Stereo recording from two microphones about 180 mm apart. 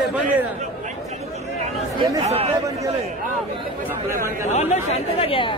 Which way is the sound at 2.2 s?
35° right (ahead or behind).